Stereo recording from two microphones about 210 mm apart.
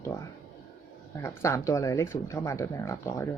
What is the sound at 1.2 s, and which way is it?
Speech, 15° left (ahead or behind).